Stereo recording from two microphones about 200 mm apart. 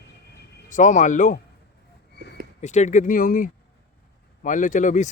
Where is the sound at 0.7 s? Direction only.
40° left (ahead or behind).